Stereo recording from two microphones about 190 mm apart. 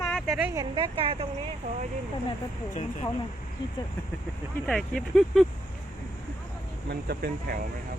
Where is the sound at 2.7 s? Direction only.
40° left (ahead or behind).